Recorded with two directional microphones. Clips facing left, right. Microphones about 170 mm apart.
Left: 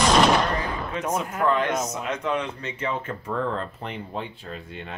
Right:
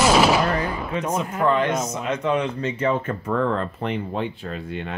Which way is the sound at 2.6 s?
35° right (ahead or behind).